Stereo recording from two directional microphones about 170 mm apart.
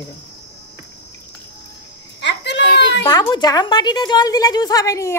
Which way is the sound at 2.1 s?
90° left.